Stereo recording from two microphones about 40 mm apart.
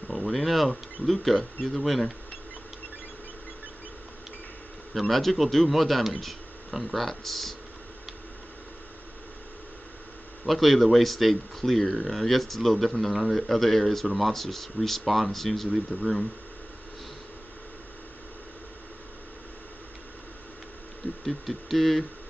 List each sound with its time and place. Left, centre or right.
0.1 s insect: centre
1.0 s speech: centre
4.9 s speech: centre
10.4 s speech: centre
15.9 s speech: right
21.3 s speech: centre